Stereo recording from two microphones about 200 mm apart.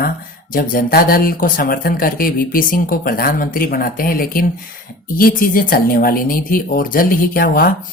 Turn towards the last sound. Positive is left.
turn(degrees=45)  # may be behind; listen again after turning